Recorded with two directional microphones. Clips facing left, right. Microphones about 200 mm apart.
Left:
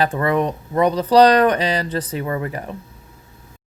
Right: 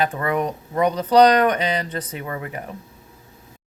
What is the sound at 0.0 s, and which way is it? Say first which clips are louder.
Speech: left 3 dB; 35° left (ahead or behind).